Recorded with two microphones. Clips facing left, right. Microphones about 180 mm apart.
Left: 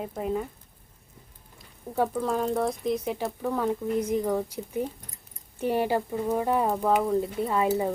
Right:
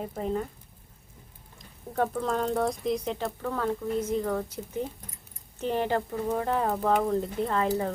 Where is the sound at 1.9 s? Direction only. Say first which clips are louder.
Left 1 dB; 5° left (ahead or behind).